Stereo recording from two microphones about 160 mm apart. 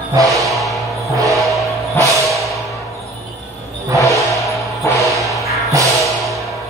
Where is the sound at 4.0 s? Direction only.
20° left (ahead or behind).